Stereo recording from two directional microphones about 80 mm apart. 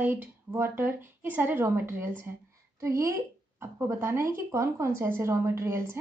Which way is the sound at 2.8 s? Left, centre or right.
Right.